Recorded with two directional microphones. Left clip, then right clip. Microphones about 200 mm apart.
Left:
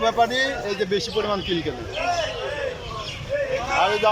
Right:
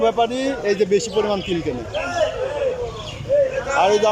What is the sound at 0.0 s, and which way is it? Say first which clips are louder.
A man's voice: right 1 dB; 10° right (ahead or behind).